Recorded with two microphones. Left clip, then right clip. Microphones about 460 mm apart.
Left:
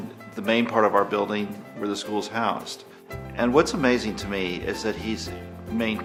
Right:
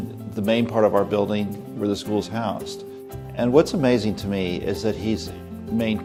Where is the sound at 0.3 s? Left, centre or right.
Right.